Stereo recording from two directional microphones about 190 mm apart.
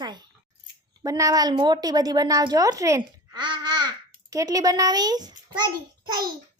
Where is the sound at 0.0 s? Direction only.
20° right (ahead or behind).